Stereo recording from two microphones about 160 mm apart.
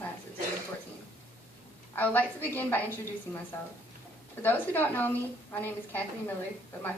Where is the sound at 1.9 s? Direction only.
10° left (ahead or behind).